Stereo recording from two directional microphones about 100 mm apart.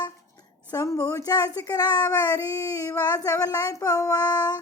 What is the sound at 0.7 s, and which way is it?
Speech, 35° left (ahead or behind).